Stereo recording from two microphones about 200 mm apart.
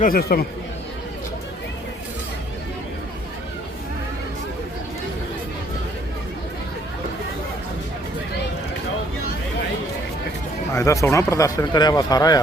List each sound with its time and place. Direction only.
0.0 s speech: 50° left (ahead or behind)
10.8 s speech: 15° left (ahead or behind)